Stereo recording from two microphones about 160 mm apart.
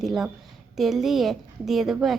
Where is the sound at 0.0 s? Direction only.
Centre (ahead or behind).